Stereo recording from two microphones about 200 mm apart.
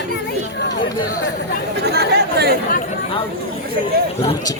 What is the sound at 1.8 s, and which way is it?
Chatter, 55° right (ahead or behind).